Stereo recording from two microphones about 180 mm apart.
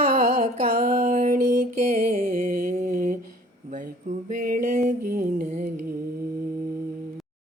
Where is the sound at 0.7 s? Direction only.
55° right (ahead or behind).